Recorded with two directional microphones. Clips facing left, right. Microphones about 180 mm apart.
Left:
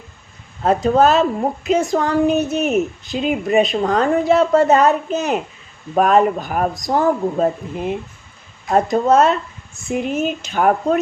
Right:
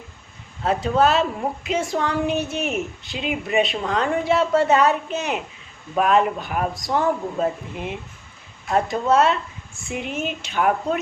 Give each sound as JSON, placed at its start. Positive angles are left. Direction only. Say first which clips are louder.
{"t": 0.6, "sound": "a woman's voice", "louder": "left 5 dB", "side_deg": 45}